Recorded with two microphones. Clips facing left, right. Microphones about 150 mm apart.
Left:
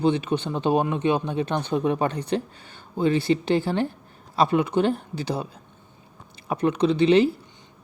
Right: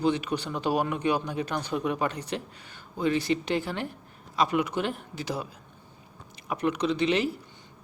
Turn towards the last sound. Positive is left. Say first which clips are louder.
# left 7 dB
turn(degrees=30)  # may be behind; listen again after turning